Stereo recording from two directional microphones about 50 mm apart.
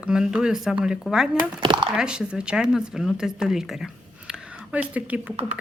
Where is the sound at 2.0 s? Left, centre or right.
Centre.